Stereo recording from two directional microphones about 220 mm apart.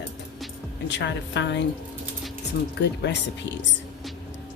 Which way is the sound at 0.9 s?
55° left (ahead or behind).